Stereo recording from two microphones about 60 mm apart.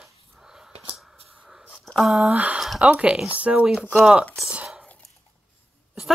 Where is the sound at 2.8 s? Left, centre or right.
Centre.